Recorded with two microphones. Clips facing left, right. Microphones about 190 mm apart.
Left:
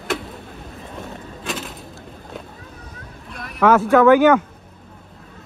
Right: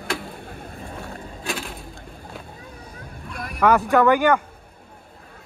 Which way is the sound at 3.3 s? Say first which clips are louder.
Right 2 dB; 50° right (ahead or behind).